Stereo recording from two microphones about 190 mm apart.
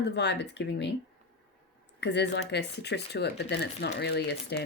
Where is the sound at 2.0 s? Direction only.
65° left (ahead or behind).